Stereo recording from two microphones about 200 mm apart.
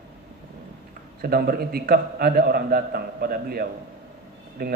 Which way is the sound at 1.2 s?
50° right (ahead or behind).